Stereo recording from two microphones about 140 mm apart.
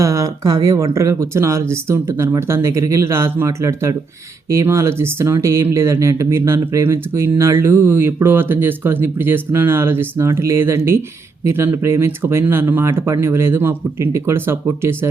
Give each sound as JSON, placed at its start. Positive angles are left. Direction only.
{"t": 0.0, "sound": "speech", "side_deg": -20}